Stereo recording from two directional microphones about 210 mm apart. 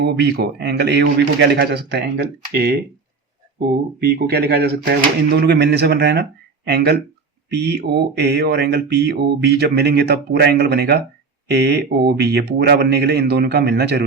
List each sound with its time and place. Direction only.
0.0 s speech: 55° right (ahead or behind)
4.0 s speech: 50° right (ahead or behind)